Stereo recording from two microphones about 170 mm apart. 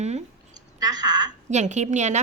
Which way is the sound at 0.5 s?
25° right (ahead or behind).